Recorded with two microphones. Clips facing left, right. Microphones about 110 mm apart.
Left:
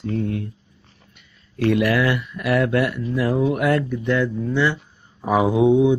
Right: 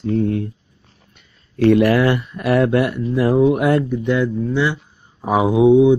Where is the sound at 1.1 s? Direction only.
35° right (ahead or behind).